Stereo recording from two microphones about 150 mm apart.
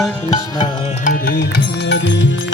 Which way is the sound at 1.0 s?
90° left.